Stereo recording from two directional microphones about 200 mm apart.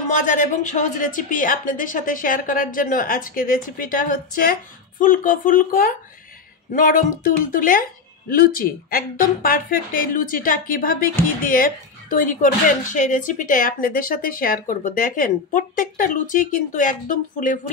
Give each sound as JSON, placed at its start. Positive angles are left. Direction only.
{"t": 0.1, "sound": "a woman's voice", "side_deg": 40}